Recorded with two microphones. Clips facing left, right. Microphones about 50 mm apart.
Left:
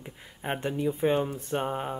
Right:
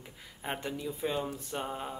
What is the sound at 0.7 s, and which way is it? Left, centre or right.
Speech, left.